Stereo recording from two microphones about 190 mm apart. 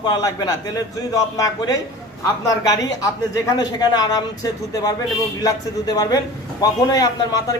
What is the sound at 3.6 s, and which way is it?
A man's voice, 20° left (ahead or behind).